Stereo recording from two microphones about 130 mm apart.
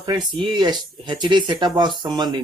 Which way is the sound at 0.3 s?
35° right (ahead or behind).